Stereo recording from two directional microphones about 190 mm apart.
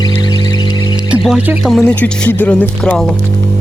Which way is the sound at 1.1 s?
5° right (ahead or behind).